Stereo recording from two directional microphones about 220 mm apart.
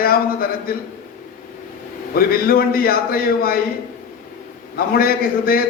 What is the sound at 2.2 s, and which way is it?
A man's voice, 40° left (ahead or behind).